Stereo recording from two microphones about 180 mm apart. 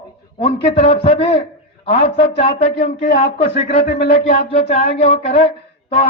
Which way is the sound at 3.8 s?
65° left (ahead or behind).